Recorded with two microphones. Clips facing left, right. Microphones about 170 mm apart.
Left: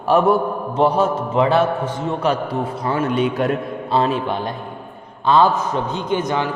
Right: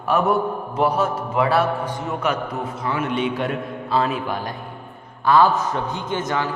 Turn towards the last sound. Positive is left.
turn(degrees=20)  # may be behind; listen again after turning